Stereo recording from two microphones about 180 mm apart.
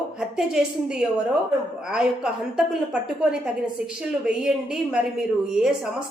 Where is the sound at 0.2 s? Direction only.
5° right (ahead or behind).